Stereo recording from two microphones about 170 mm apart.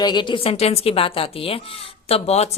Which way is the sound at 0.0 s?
25° left (ahead or behind).